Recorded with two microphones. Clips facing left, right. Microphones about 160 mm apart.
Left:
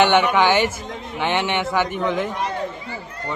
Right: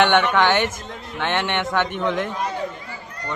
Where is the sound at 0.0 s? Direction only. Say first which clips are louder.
Left 1 dB; 10° left (ahead or behind).